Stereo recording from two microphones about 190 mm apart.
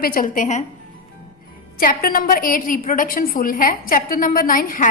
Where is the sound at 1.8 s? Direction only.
50° left (ahead or behind).